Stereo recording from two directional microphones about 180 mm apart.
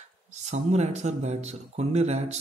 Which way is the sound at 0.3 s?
40° right (ahead or behind).